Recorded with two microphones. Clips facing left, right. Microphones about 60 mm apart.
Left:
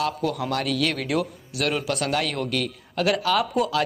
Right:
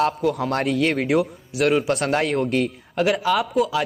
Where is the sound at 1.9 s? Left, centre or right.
Right.